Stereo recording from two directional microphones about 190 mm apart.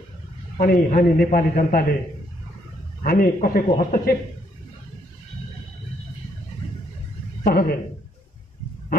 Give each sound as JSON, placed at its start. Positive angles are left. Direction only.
{"t": 0.6, "sound": "a man's voice", "side_deg": 45}
{"t": 3.0, "sound": "a man's voice", "side_deg": 45}
{"t": 7.4, "sound": "a man's voice", "side_deg": 50}